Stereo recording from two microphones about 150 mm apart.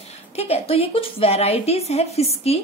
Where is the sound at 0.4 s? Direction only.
40° left (ahead or behind).